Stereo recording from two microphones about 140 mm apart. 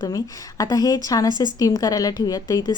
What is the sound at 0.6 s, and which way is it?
A woman's voice, 25° left (ahead or behind).